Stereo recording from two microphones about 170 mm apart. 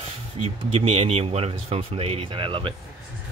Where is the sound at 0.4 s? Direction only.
35° right (ahead or behind).